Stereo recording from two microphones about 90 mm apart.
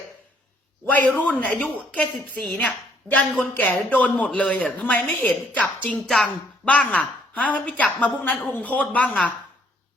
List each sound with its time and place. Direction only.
0.9 s a man's voice: 20° left (ahead or behind)